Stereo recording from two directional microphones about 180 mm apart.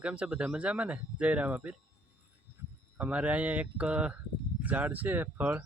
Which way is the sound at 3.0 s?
5° right (ahead or behind).